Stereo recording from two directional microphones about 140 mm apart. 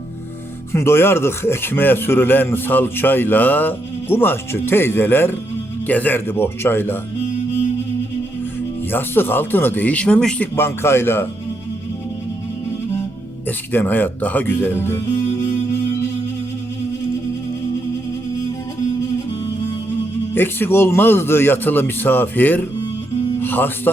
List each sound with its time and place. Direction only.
0.7 s a man's voice: 15° left (ahead or behind)
8.9 s a man's voice: 15° left (ahead or behind)
10.5 s a man's voice: 15° left (ahead or behind)
13.7 s a man's voice: 15° left (ahead or behind)
20.3 s a man's voice: 15° left (ahead or behind)